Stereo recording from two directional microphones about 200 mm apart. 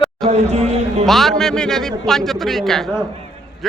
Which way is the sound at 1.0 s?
Centre (ahead or behind).